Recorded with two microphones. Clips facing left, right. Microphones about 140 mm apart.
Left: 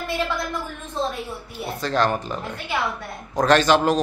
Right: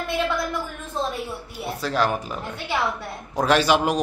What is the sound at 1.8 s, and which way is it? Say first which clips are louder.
A man's voice: left 2 dB; 5° right (ahead or behind).